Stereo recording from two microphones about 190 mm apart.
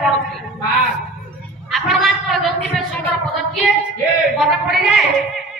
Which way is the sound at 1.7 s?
Centre (ahead or behind).